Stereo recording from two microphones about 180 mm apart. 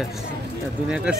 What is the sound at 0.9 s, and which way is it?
Speech, 5° right (ahead or behind).